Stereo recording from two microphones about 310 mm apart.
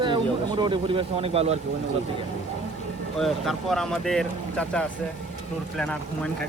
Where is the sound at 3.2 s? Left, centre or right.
Centre.